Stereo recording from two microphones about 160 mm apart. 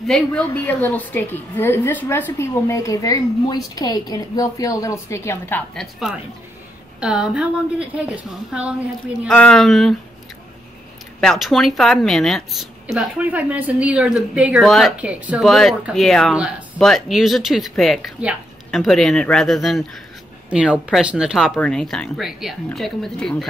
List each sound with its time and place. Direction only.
0.0 s a woman's voice: 5° left (ahead or behind)
5.8 s a woman's voice: centre (ahead or behind)
9.3 s speech: 5° left (ahead or behind)
11.1 s a woman's voice: centre (ahead or behind)